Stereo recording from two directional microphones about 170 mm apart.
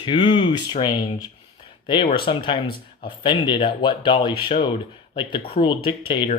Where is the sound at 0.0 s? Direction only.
30° left (ahead or behind).